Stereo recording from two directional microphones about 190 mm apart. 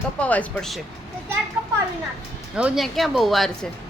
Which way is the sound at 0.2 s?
5° left (ahead or behind).